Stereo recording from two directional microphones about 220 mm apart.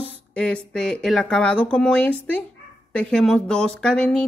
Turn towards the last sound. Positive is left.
turn(degrees=5)  # may be behind; listen again after turning